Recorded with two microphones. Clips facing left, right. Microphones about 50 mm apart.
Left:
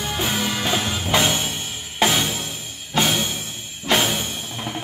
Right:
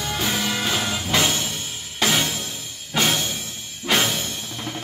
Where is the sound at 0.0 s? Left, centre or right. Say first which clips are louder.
Left 1 dB; centre.